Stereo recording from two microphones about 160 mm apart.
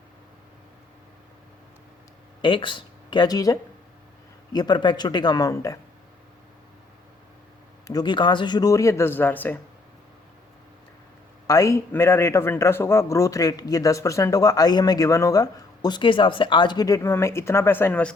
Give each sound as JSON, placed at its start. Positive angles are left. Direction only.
{"t": 2.4, "sound": "a man's voice", "side_deg": 30}
{"t": 7.9, "sound": "a man's voice", "side_deg": 25}
{"t": 11.4, "sound": "a man's voice", "side_deg": 20}